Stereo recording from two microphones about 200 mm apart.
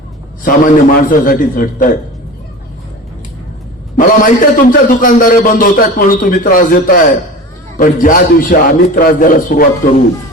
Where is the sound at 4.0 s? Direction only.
45° left (ahead or behind).